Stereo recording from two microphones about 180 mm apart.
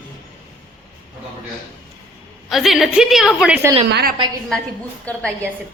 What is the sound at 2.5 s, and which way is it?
A woman's voice, centre (ahead or behind).